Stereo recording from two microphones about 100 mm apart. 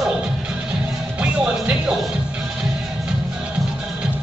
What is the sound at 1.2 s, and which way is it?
Music, 15° right (ahead or behind).